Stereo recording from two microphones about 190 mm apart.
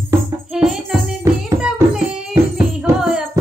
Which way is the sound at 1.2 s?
15° right (ahead or behind).